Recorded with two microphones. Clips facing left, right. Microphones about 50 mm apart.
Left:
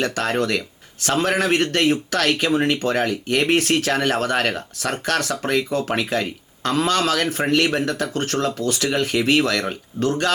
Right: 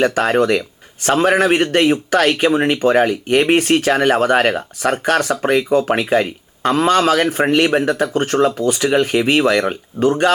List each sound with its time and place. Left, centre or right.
0.0 s speech: centre